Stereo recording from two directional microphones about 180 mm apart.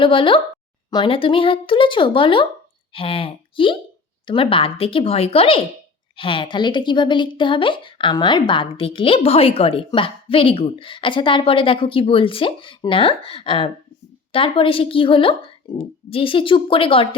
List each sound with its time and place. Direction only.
0.0 s speech: 30° left (ahead or behind)